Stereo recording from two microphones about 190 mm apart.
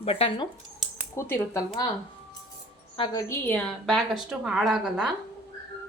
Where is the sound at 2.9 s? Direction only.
25° left (ahead or behind).